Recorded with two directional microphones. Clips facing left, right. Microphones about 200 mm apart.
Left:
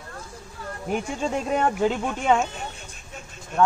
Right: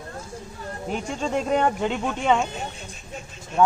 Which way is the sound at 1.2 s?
5° left (ahead or behind).